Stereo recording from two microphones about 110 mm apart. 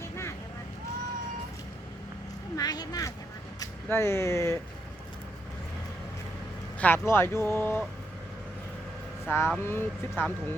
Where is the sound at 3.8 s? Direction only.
20° left (ahead or behind).